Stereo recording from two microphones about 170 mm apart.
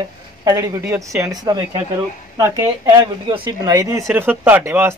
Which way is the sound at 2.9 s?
30° right (ahead or behind).